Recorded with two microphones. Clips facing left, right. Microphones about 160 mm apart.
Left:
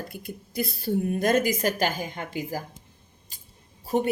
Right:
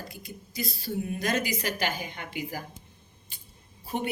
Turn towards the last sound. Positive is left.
turn(degrees=40)  # may be behind; listen again after turning